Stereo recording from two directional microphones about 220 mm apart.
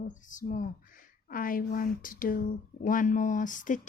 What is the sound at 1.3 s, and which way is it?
Speech, 40° left (ahead or behind).